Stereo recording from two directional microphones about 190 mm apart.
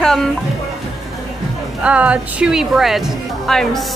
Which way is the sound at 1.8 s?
5° right (ahead or behind).